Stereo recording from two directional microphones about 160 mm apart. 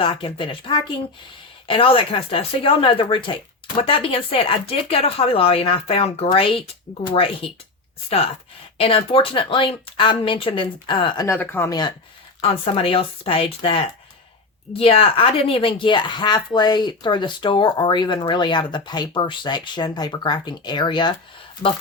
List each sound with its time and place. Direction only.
0.0 s speech: 35° left (ahead or behind)
8.8 s speech: 35° left (ahead or behind)
11.3 s speech: 15° left (ahead or behind)
12.4 s a woman's voice: 35° left (ahead or behind)